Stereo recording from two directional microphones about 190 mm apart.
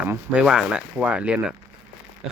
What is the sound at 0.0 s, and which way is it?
Speech, 10° right (ahead or behind).